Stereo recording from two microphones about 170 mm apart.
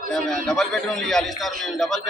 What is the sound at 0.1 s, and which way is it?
A man's voice, 5° left (ahead or behind).